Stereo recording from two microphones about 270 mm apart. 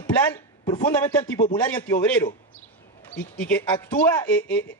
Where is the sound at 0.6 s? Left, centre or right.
Centre.